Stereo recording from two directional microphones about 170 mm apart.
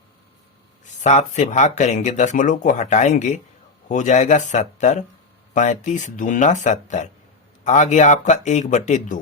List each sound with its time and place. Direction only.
0.9 s speech: 45° left (ahead or behind)